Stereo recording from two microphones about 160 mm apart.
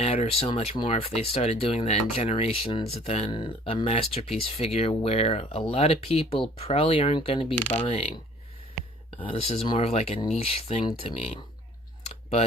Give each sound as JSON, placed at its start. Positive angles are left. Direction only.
{"t": 0.0, "sound": "speech", "side_deg": 40}
{"t": 7.6, "sound": "speech", "side_deg": 10}
{"t": 7.9, "sound": "speech", "side_deg": 35}